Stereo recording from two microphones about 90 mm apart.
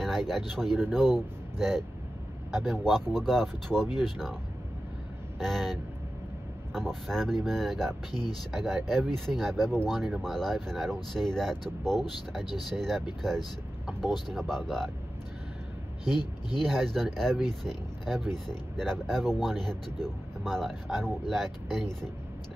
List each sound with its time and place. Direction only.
0.0 s speech: centre (ahead or behind)
5.4 s speech: 5° left (ahead or behind)
16.2 s speech: 55° left (ahead or behind)
16.6 s speech: 5° left (ahead or behind)